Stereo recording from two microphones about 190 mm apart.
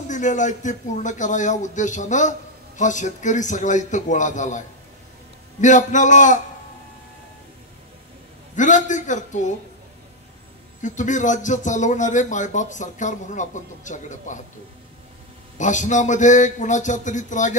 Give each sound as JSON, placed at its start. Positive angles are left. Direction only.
{"t": 0.1, "sound": "a man's voice", "side_deg": 40}
{"t": 8.5, "sound": "a man's voice", "side_deg": 40}
{"t": 10.8, "sound": "a man's voice", "side_deg": 40}
{"t": 15.5, "sound": "a man's voice", "side_deg": 40}